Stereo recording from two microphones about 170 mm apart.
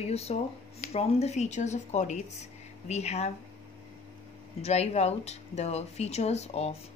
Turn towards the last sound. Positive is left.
turn(degrees=40)  # may be behind; listen again after turning